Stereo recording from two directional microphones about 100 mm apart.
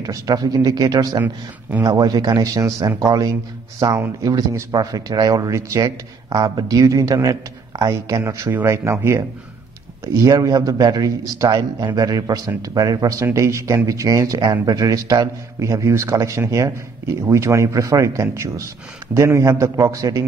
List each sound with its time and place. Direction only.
0.0 s speech: 35° right (ahead or behind)